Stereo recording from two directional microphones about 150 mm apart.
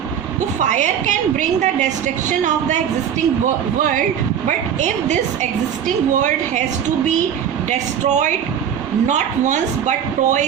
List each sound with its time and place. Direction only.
0.6 s a woman's voice: 55° right (ahead or behind)
7.7 s a woman's voice: 50° right (ahead or behind)